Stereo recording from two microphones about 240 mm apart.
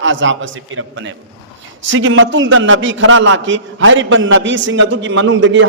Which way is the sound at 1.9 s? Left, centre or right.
Right.